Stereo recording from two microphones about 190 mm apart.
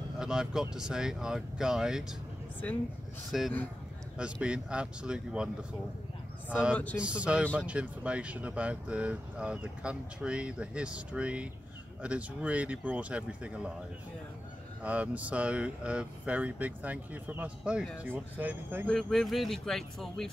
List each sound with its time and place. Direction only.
0.2 s speech: 5° right (ahead or behind)
3.3 s speech: centre (ahead or behind)
14.8 s speech: 10° right (ahead or behind)
18.9 s speech: centre (ahead or behind)